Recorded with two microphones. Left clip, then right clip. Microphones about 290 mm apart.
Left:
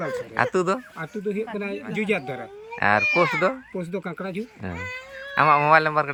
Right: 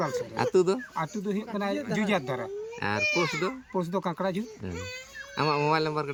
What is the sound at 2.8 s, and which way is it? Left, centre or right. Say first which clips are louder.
Speech: left 8 dB; centre.